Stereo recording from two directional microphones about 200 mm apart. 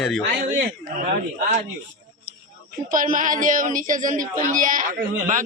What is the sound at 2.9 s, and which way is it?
Speech, 45° right (ahead or behind).